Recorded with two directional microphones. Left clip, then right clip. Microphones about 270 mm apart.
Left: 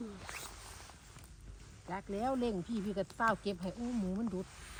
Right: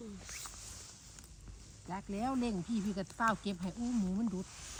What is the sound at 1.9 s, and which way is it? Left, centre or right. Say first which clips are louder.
Speech: left 2 dB; right.